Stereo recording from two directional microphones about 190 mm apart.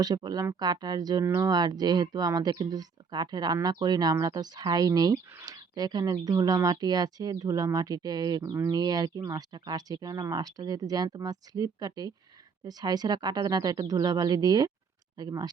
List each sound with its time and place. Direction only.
0.0 s speech: 20° right (ahead or behind)